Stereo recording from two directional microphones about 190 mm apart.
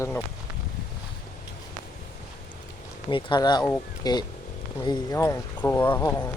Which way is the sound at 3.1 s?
25° left (ahead or behind).